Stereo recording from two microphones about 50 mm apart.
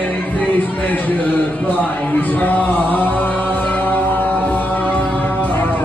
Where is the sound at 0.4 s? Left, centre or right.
Left.